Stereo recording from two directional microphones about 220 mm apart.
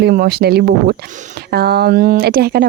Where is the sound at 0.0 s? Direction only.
45° right (ahead or behind).